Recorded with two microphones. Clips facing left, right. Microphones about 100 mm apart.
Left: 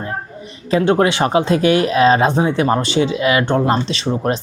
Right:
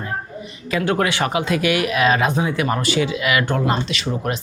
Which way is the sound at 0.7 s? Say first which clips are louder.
Left 6 dB; 30° left (ahead or behind).